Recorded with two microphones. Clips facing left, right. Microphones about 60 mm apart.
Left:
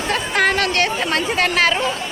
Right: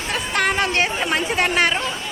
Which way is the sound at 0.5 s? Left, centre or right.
Centre.